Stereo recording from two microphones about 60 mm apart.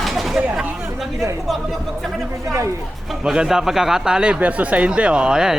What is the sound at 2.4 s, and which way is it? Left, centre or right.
Speech, right.